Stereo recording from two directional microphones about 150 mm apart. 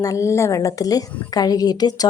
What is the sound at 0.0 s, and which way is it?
A woman's voice, 20° left (ahead or behind).